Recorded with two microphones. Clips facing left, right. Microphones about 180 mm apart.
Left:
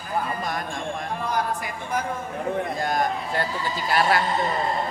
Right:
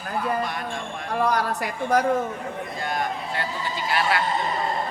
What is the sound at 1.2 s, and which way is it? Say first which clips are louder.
Speech: right 5 dB; 70° right (ahead or behind).